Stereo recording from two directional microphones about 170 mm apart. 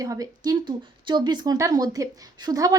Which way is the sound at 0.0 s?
20° right (ahead or behind).